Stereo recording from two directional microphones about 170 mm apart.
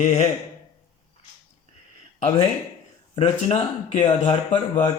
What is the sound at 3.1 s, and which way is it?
Speech, 35° left (ahead or behind).